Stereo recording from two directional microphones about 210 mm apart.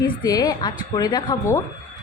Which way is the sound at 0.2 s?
20° left (ahead or behind).